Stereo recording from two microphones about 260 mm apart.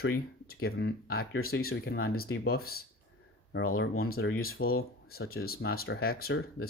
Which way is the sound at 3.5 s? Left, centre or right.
Left.